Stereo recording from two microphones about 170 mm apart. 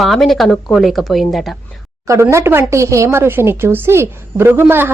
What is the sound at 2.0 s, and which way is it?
A woman's voice, 15° right (ahead or behind).